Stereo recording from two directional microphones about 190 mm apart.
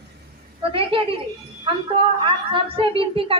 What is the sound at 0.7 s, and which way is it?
Speech, 30° right (ahead or behind).